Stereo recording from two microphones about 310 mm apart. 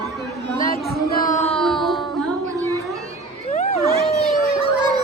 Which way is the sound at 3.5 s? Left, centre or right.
Left.